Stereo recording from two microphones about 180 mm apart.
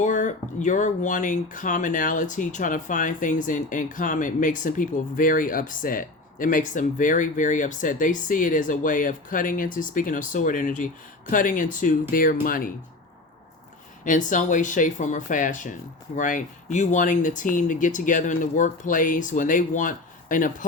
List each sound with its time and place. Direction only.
0.0 s speech: 45° left (ahead or behind)
14.0 s speech: 45° left (ahead or behind)